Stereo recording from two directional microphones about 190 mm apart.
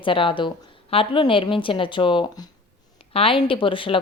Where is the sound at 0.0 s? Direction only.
25° left (ahead or behind).